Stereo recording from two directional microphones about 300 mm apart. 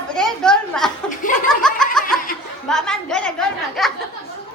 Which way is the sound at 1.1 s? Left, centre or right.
Left.